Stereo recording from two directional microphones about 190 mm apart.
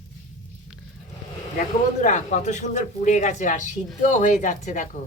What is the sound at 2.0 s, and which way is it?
Speech, 40° left (ahead or behind).